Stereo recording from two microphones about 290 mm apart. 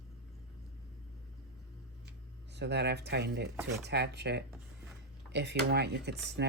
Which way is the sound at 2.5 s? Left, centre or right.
Right.